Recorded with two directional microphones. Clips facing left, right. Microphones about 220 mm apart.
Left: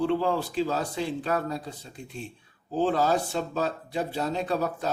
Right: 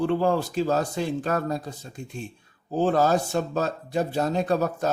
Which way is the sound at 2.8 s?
45° right (ahead or behind).